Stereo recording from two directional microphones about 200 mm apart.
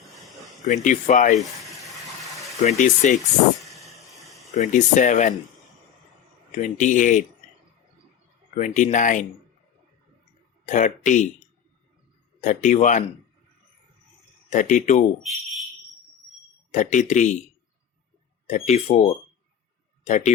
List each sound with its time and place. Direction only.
0.2 s a sound: centre (ahead or behind)
0.6 s speech: 40° left (ahead or behind)
1.4 s boiling: centre (ahead or behind)
2.6 s speech: 40° left (ahead or behind)
3.6 s a sound: centre (ahead or behind)
4.5 s speech: 40° left (ahead or behind)
6.6 s speech: 40° left (ahead or behind)
8.5 s speech: 40° left (ahead or behind)
10.7 s speech: 40° left (ahead or behind)
12.4 s speech: 40° left (ahead or behind)
14.5 s speech: 40° left (ahead or behind)
16.7 s speech: 35° left (ahead or behind)
18.4 s speech: 35° left (ahead or behind)